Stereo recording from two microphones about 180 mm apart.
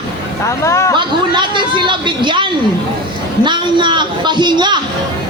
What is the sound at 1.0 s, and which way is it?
A man's voice, 25° right (ahead or behind).